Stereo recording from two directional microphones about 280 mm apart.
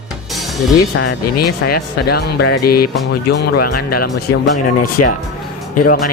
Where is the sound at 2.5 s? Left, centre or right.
Left.